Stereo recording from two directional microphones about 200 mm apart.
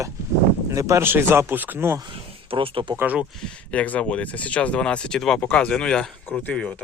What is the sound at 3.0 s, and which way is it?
Speech, 10° right (ahead or behind).